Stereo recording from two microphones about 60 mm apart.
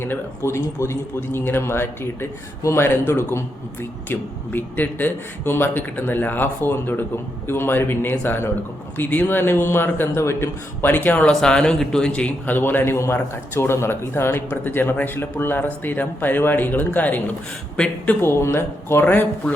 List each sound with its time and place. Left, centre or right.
0.4 s a man's voice: left
11.3 s speech: centre
12.5 s a man's voice: left
18.2 s a man's voice: left
19.0 s speech: left